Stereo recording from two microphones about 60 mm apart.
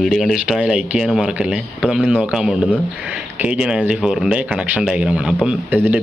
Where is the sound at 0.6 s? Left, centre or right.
Centre.